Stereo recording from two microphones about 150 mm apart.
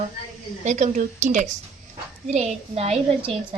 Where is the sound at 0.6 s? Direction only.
50° right (ahead or behind).